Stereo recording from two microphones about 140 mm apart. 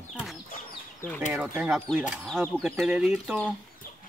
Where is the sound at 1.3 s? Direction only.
10° right (ahead or behind).